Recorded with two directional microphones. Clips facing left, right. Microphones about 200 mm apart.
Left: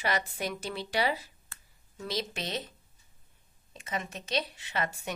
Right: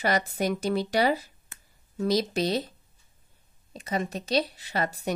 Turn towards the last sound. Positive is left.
turn(degrees=-35)  # may be behind; listen again after turning